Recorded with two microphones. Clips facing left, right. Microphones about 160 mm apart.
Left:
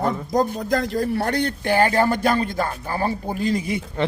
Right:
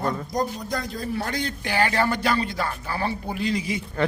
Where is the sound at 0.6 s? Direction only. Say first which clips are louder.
Left 7 dB; 90° left; by 3.8 s 50° left (ahead or behind).